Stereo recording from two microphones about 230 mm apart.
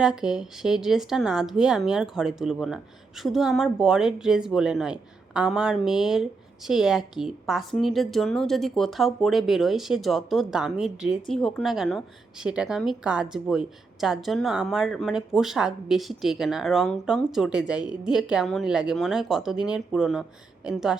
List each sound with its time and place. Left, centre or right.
0.0 s speech: centre